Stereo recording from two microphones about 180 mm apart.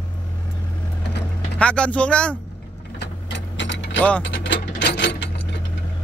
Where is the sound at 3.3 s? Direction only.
90° left.